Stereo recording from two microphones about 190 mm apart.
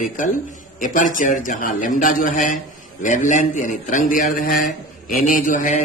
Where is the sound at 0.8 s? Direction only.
45° left (ahead or behind).